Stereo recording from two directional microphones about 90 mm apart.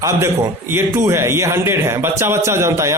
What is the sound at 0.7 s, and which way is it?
A man's voice, 30° right (ahead or behind).